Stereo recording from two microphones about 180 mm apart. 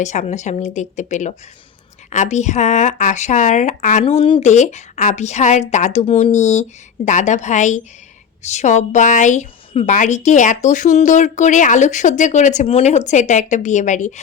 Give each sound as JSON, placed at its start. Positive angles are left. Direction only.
{"t": 0.0, "sound": "speech", "side_deg": 40}